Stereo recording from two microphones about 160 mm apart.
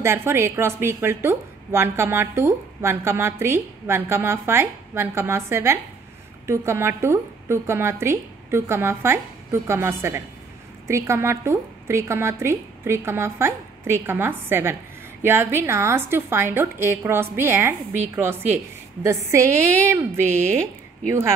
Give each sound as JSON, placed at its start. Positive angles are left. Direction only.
{"t": 0.0, "sound": "speech", "side_deg": -15}